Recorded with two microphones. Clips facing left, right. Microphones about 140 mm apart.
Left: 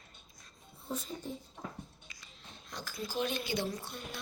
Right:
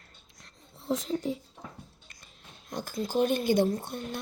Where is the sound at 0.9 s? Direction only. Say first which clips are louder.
Right 10 dB; 90° right.